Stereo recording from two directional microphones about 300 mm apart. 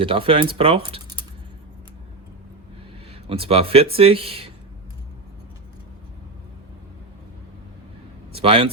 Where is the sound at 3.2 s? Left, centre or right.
Centre.